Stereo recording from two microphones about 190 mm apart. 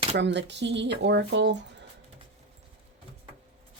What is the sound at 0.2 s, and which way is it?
Speech, 65° right (ahead or behind).